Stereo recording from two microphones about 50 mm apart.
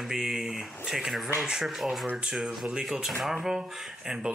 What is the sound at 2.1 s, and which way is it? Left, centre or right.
Speech, centre.